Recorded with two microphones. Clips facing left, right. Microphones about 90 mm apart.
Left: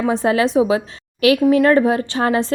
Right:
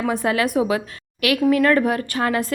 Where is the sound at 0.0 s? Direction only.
30° left (ahead or behind).